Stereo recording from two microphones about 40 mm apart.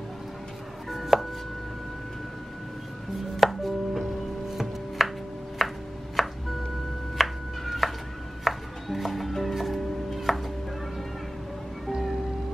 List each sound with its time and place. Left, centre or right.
0.8 s chopping: centre
3.3 s chopping: centre
6.2 s music: centre
7.2 s a sound: centre
8.5 s music: centre